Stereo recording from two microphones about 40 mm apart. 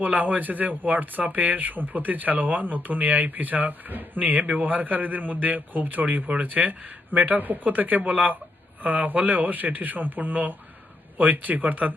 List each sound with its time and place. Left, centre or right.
0.0 s speech: right